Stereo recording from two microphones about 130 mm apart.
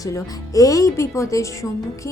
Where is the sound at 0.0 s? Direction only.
25° left (ahead or behind).